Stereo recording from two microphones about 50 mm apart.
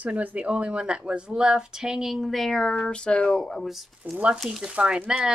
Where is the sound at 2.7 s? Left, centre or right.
Centre.